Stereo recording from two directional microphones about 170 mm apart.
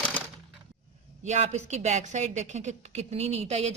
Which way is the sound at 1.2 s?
40° right (ahead or behind).